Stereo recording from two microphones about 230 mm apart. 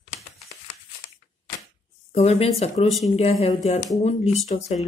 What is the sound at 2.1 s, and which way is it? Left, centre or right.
A woman's voice, left.